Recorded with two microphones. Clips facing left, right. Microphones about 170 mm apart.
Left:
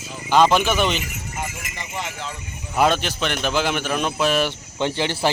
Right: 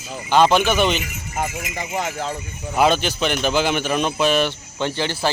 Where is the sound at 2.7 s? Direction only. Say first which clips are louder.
Right 2 dB; centre (ahead or behind).